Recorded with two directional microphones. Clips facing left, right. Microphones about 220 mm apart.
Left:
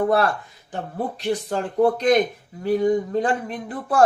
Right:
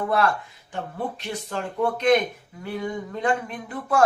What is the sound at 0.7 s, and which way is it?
Speech, 35° left (ahead or behind).